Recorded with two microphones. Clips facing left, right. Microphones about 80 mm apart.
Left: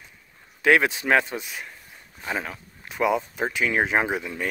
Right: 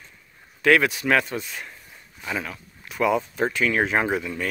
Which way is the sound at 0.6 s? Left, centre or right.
Left.